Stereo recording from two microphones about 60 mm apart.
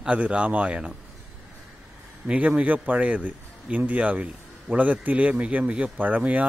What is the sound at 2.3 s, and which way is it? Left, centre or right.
Speech, right.